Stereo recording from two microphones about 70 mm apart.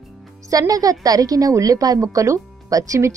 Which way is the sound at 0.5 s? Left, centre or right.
Right.